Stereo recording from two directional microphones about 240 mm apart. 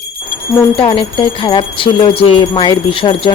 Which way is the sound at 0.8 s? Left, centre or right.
Left.